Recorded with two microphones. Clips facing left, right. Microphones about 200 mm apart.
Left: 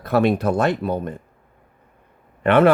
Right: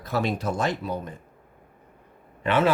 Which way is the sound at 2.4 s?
60° left (ahead or behind).